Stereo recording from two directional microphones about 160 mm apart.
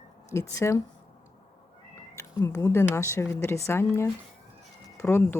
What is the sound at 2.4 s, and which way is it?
Speech, 20° left (ahead or behind).